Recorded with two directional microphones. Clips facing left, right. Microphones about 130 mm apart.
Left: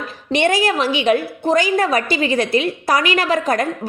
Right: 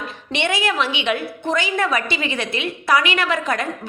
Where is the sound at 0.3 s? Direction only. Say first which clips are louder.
Left 5 dB; 40° left (ahead or behind).